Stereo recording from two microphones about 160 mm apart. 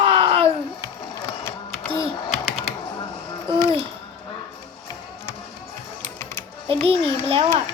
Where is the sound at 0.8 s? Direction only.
20° left (ahead or behind).